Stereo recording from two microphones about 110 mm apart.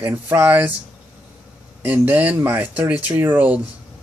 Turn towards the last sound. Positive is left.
turn(degrees=-15)  # may be behind; listen again after turning